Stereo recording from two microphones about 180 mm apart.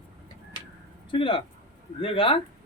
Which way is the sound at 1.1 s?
30° left (ahead or behind).